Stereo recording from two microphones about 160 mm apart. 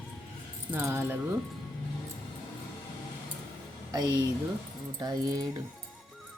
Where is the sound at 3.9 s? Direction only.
25° right (ahead or behind).